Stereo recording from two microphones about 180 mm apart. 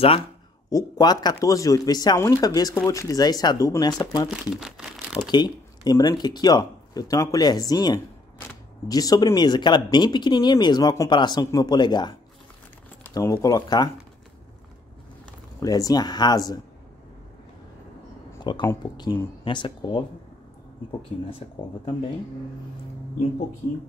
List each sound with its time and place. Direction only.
0.7 s speech: 20° left (ahead or behind)
4.4 s crumpling: 5° right (ahead or behind)
5.3 s speech: 20° left (ahead or behind)
15.6 s speech: 20° left (ahead or behind)
18.3 s a sound: 25° left (ahead or behind)
18.8 s speech: 25° left (ahead or behind)
21.3 s speech: 30° left (ahead or behind)